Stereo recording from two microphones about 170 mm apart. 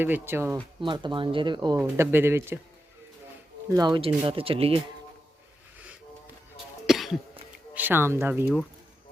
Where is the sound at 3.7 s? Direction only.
25° right (ahead or behind).